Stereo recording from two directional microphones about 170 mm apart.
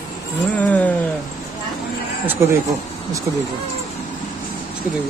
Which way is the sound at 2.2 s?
15° right (ahead or behind).